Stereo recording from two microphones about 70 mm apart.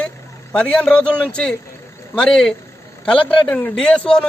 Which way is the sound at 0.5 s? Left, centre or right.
Centre.